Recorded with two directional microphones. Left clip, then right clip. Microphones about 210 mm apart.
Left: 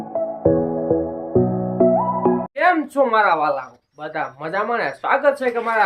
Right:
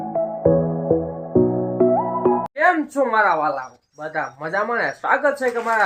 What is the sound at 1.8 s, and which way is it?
Speech, centre (ahead or behind).